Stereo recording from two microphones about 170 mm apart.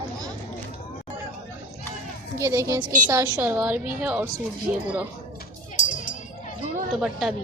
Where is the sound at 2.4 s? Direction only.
20° right (ahead or behind).